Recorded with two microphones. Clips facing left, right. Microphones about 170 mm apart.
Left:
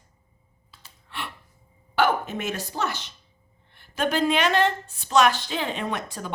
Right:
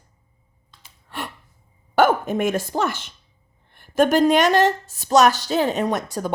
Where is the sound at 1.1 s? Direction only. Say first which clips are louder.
Right 4 dB; 40° right (ahead or behind).